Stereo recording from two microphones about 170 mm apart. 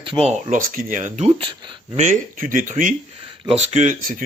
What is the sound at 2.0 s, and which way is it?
Speech, 50° right (ahead or behind).